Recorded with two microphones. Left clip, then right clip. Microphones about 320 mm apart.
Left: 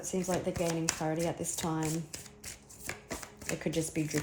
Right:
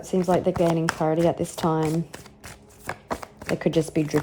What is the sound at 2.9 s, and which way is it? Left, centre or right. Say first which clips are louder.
Chopping: right 10 dB; centre.